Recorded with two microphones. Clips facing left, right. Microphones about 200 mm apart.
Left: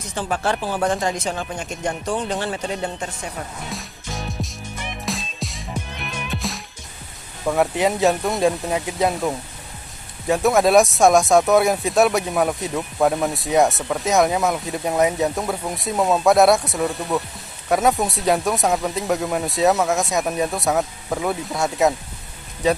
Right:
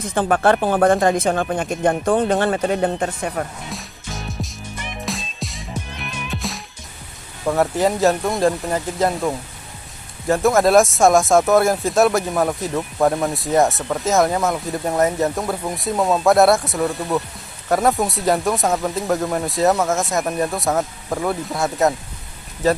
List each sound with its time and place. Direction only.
0.1 s speech: 55° right (ahead or behind)
3.7 s music: centre (ahead or behind)
7.4 s speech: centre (ahead or behind)